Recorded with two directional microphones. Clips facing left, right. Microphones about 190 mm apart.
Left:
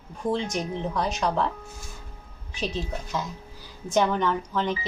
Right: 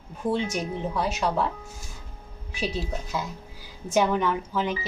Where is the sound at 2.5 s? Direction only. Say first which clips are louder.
Right 1 dB; 10° right (ahead or behind).